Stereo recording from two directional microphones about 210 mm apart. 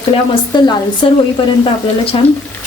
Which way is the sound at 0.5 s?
20° left (ahead or behind).